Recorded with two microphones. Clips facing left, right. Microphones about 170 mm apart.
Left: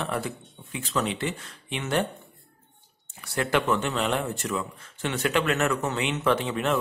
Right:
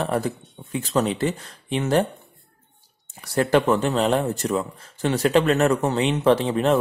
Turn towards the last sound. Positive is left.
turn(degrees=-35)  # may be behind; listen again after turning